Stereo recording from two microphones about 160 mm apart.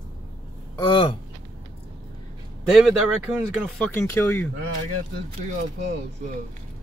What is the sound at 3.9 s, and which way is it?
Speech, 15° left (ahead or behind).